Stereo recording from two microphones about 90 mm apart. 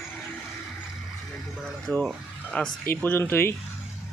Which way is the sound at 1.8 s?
5° left (ahead or behind).